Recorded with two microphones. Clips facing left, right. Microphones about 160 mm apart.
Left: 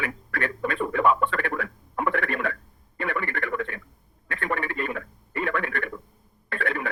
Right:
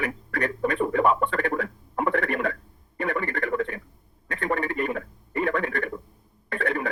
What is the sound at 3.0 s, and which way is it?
Radio, 20° right (ahead or behind).